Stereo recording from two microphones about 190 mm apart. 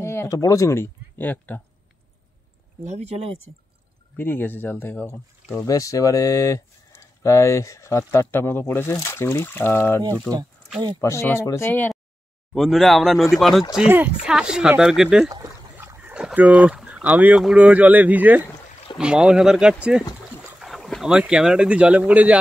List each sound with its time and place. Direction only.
0.0 s speech: 15° left (ahead or behind)
2.8 s speech: 35° right (ahead or behind)
4.2 s speech: 10° left (ahead or behind)
15.2 s speech: 15° right (ahead or behind)